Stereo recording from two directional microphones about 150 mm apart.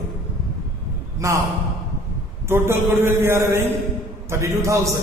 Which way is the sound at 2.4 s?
15° right (ahead or behind).